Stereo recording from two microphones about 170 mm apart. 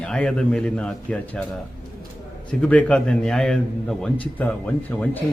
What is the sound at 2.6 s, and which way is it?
A man's voice, 5° left (ahead or behind).